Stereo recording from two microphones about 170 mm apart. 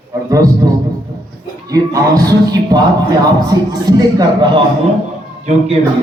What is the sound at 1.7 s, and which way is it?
Speech, 20° right (ahead or behind).